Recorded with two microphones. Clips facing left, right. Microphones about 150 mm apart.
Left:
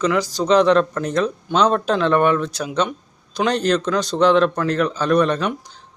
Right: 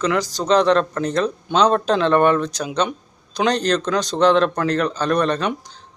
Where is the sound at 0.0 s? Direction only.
10° left (ahead or behind).